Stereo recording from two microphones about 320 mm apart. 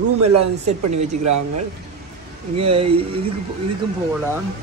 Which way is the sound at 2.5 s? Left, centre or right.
Centre.